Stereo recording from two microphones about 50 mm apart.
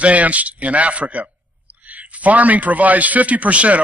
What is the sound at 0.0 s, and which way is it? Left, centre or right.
A man's voice, right.